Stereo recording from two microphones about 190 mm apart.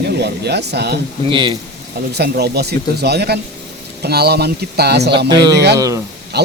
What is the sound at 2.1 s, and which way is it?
Speech, 60° right (ahead or behind).